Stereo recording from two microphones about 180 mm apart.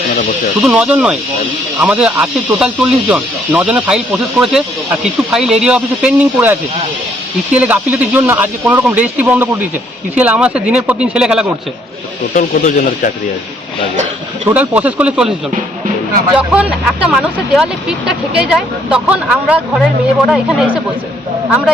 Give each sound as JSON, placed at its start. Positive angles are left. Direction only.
{"t": 0.6, "sound": "speech", "side_deg": -5}
{"t": 12.3, "sound": "speech", "side_deg": 50}
{"t": 14.4, "sound": "speech", "side_deg": -10}